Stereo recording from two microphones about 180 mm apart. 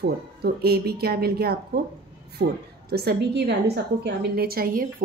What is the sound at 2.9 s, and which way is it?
A woman's voice, 65° right (ahead or behind).